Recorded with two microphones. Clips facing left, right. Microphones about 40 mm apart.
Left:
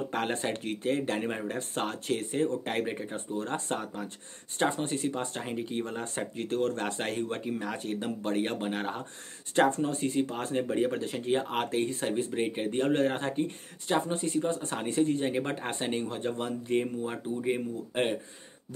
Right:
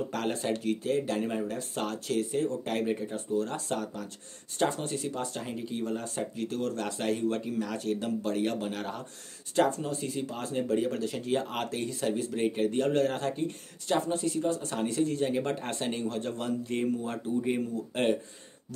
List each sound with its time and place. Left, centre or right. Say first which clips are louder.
0.1 s speech: even; left
14.1 s speech: even; left; by 18.1 s centre